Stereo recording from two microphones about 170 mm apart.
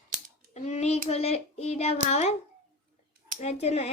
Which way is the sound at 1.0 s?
40° left (ahead or behind).